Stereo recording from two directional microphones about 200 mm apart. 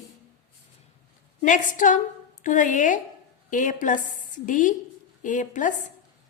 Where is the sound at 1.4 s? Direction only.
40° left (ahead or behind).